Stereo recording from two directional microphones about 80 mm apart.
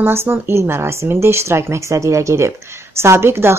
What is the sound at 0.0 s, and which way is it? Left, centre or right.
Speech, right.